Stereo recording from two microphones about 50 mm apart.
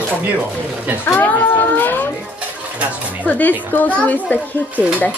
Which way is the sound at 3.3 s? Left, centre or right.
Left.